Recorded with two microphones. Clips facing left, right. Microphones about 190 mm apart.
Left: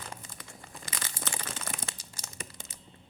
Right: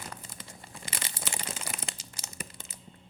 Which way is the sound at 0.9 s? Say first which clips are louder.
Right 1 dB; 25° right (ahead or behind).